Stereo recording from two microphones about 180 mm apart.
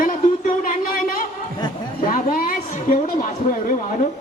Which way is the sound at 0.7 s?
55° left (ahead or behind).